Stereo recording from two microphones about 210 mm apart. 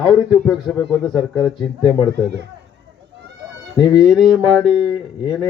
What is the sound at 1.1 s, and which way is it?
Speech, 20° left (ahead or behind).